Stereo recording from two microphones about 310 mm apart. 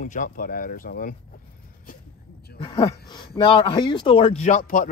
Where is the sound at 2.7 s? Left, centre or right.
Centre.